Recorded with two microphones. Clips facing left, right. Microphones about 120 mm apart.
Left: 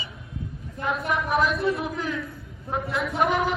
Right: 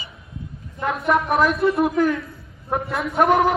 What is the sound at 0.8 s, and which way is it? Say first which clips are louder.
A man's voice: right 6 dB; 60° right (ahead or behind).